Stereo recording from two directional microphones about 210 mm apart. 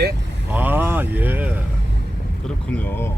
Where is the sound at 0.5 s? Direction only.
10° right (ahead or behind).